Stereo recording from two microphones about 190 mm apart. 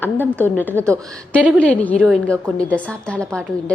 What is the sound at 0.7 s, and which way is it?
Speech, 15° right (ahead or behind).